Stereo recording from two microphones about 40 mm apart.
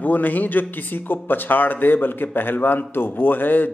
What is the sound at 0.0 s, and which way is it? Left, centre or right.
A man's voice, left.